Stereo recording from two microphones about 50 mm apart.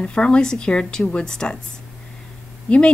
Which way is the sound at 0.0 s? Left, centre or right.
Centre.